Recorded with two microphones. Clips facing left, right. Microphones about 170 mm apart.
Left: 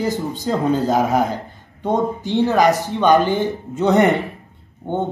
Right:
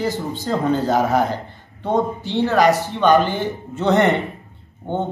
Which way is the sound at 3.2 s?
45° left (ahead or behind).